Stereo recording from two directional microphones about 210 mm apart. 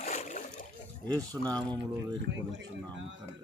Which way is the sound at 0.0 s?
35° left (ahead or behind).